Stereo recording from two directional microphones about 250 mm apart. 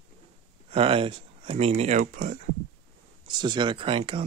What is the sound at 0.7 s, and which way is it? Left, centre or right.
Speech, right.